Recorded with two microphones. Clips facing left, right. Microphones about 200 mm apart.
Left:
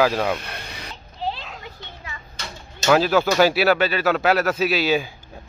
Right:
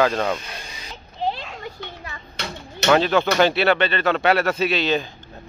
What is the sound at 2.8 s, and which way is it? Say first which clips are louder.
Speech: even; 5° left (ahead or behind).